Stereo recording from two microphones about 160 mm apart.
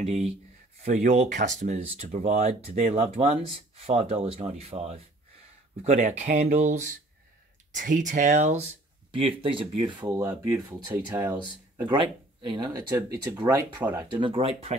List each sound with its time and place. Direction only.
0.0 s speech: 40° right (ahead or behind)
9.1 s speech: 35° right (ahead or behind); by 11.9 s 15° right (ahead or behind)
11.9 s speech: 30° right (ahead or behind); by 14.0 s 10° right (ahead or behind)
14.0 s speech: 30° right (ahead or behind)